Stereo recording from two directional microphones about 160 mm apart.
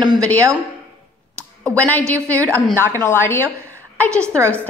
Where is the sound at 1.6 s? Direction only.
10° left (ahead or behind).